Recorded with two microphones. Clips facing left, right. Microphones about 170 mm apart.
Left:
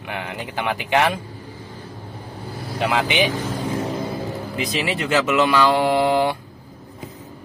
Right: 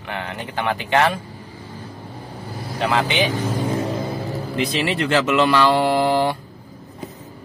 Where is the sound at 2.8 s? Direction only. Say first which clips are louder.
Even; 15° left (ahead or behind).